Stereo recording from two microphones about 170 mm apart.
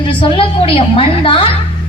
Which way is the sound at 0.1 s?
30° left (ahead or behind).